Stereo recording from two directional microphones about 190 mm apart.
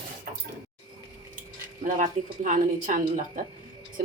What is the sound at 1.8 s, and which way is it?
Speech, 45° right (ahead or behind).